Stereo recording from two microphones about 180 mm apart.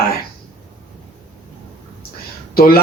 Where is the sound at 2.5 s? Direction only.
55° left (ahead or behind).